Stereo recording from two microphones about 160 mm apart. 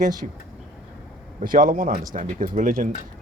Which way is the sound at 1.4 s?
60° right (ahead or behind).